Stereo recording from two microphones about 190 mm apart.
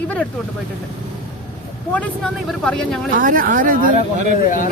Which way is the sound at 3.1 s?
45° right (ahead or behind).